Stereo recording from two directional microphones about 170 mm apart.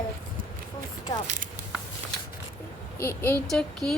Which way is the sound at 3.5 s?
5° left (ahead or behind).